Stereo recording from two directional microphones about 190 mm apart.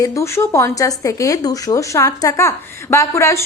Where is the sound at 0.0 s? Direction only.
15° left (ahead or behind).